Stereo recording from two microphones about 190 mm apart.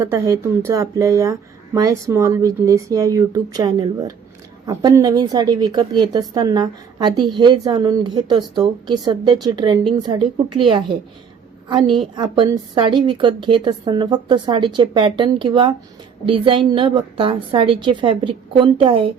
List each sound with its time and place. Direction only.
0.0 s a woman's voice: 15° right (ahead or behind)
12.1 s a woman's voice: 25° right (ahead or behind)